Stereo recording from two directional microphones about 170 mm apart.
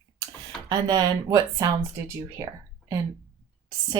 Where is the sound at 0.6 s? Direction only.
25° right (ahead or behind).